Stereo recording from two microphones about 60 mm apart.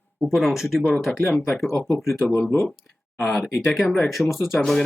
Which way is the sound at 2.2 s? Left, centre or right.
Left.